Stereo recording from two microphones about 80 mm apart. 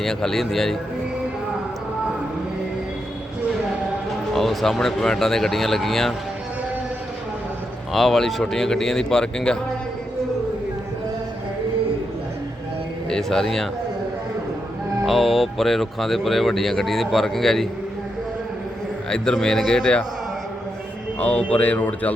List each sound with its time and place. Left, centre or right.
0.0 s speech: centre
4.4 s speech: centre
7.9 s a man's voice: centre
13.1 s speech: centre
15.0 s speech: centre
19.1 s a man's voice: centre
21.2 s speech: centre